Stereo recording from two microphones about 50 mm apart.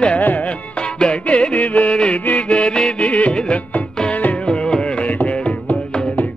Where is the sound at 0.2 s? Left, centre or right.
Left.